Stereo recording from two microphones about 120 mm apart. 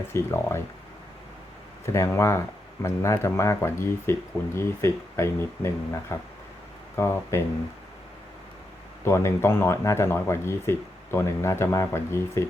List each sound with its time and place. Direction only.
0.1 s speech: 20° left (ahead or behind)
1.8 s speech: 25° left (ahead or behind)
9.0 s speech: 20° left (ahead or behind)